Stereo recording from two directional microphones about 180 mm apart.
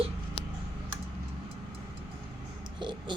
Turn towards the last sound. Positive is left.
turn(degrees=-25)  # may be behind; listen again after turning